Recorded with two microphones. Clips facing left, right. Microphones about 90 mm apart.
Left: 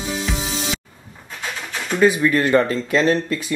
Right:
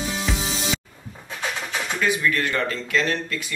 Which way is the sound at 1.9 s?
30° left (ahead or behind).